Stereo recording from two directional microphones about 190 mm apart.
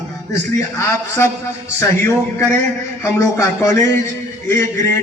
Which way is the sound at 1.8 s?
15° left (ahead or behind).